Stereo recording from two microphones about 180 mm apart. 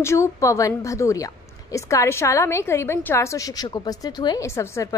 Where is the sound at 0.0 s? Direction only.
15° left (ahead or behind).